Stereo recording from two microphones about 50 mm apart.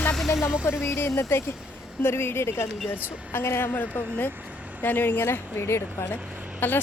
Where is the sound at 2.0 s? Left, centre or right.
Left.